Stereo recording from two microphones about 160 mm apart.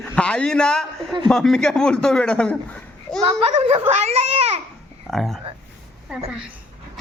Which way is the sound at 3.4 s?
40° right (ahead or behind).